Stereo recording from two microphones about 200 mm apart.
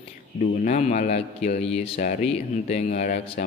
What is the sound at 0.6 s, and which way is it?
A man's voice, 35° left (ahead or behind).